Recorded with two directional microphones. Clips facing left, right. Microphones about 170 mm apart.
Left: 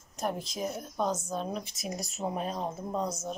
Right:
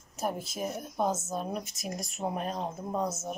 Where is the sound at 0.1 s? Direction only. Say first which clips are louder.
Even; 5° right (ahead or behind).